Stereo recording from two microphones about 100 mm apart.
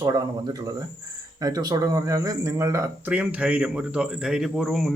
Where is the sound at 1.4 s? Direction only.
40° right (ahead or behind).